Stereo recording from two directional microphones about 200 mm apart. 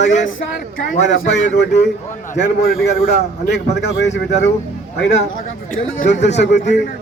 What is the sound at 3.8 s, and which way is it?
A man's voice, 60° left (ahead or behind).